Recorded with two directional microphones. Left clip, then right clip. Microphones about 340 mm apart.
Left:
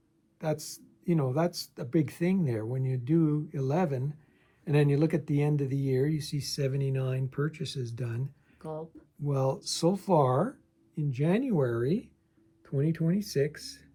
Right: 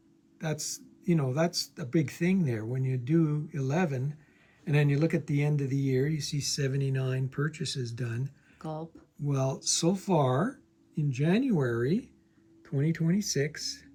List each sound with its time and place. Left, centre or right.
0.3 s speech: centre
8.5 s a sound: centre
9.2 s speech: centre